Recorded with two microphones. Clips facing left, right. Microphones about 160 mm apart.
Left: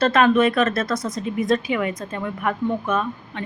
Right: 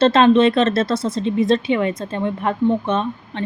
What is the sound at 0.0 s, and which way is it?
Speech, 25° right (ahead or behind).